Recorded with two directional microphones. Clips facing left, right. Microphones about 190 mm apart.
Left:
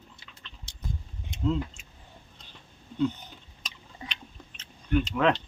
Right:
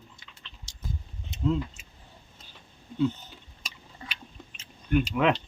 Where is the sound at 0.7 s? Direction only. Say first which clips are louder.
Left 2 dB; 60° left (ahead or behind).